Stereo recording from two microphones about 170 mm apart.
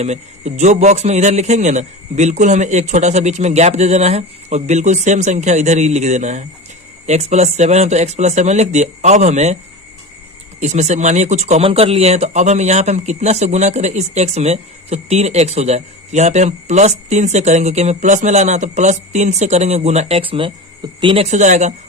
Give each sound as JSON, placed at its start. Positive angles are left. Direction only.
{"t": 0.0, "sound": "a man's voice", "side_deg": -40}
{"t": 10.6, "sound": "speech", "side_deg": -40}